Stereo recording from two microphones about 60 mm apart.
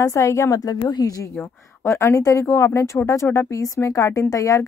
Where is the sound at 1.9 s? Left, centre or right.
Left.